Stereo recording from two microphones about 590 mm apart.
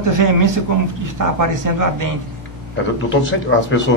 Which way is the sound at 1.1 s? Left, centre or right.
Right.